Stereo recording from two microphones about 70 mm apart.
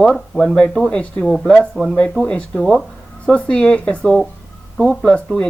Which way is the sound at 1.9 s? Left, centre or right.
Centre.